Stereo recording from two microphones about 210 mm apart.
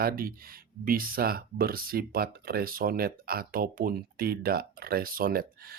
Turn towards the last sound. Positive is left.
turn(degrees=-45)  # may be behind; listen again after turning